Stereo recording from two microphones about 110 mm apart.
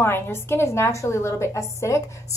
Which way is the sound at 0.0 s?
20° left (ahead or behind).